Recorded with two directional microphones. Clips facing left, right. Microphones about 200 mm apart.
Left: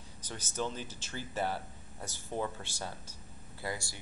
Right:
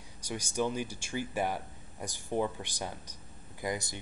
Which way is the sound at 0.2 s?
10° right (ahead or behind).